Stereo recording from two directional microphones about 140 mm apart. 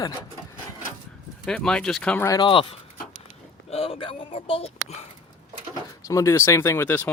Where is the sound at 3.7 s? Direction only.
45° left (ahead or behind).